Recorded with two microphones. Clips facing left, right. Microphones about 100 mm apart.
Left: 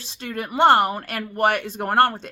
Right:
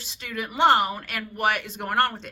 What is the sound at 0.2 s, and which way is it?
Speech, 40° left (ahead or behind).